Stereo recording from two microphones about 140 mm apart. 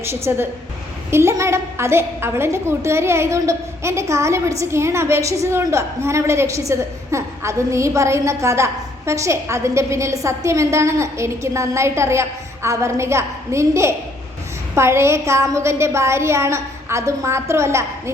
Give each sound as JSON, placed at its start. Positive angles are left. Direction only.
{"t": 0.0, "sound": "a woman's voice", "side_deg": -15}